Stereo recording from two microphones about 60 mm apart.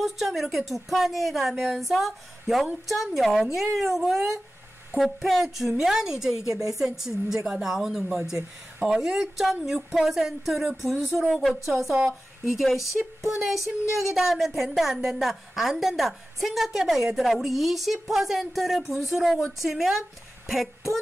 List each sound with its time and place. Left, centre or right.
0.0 s a woman's voice: centre
6.5 s speech: right
6.8 s a woman's voice: centre